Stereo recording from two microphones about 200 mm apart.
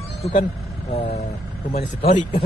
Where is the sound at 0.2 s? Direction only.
40° left (ahead or behind).